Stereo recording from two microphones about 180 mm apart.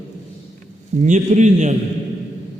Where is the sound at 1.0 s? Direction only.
40° right (ahead or behind).